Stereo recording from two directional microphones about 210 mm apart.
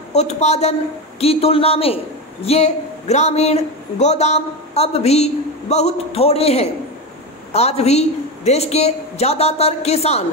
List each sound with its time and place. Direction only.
0.1 s speech: 30° left (ahead or behind)